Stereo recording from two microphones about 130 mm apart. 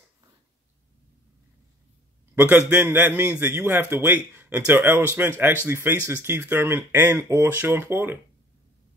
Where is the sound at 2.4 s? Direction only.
15° right (ahead or behind).